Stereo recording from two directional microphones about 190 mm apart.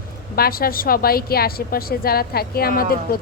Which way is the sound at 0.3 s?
50° left (ahead or behind).